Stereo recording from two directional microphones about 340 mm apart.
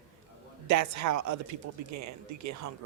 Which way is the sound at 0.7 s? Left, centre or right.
Right.